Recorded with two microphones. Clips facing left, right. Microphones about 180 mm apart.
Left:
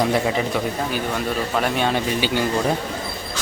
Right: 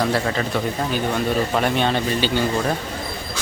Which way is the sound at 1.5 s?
5° left (ahead or behind).